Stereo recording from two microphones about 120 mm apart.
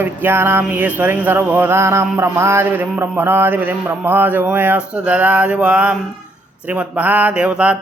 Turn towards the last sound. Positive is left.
turn(degrees=-10)  # may be behind; listen again after turning